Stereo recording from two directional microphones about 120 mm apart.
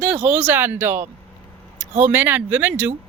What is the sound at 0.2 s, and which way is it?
Speech, 60° right (ahead or behind).